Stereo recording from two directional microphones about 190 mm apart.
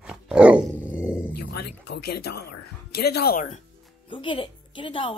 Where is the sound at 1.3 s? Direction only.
60° left (ahead or behind).